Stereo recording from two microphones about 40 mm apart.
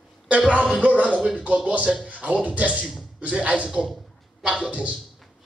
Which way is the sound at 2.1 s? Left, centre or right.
Right.